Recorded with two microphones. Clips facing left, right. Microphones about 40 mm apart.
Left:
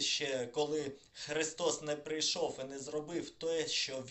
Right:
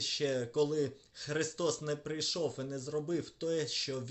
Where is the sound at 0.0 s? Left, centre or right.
Left.